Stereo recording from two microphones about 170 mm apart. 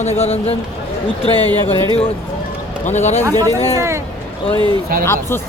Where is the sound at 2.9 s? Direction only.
45° left (ahead or behind).